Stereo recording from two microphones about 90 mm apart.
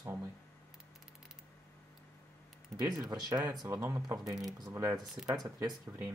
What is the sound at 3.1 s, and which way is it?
Speech, 45° right (ahead or behind).